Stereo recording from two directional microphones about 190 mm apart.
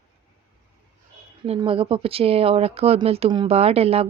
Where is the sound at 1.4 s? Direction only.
30° right (ahead or behind).